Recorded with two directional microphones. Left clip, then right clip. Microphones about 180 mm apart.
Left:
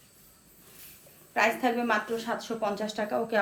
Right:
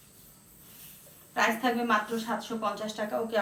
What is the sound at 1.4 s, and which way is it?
A woman's voice, 55° left (ahead or behind).